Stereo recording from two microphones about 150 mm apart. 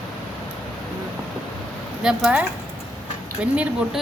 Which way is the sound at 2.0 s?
5° right (ahead or behind).